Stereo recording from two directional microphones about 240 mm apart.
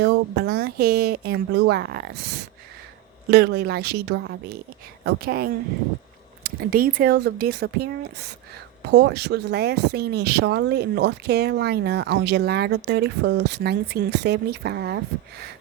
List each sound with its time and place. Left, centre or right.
0.0 s speech: right